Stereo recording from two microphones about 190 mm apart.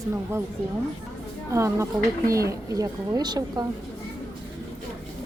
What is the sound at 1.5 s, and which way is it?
Speech, 15° right (ahead or behind).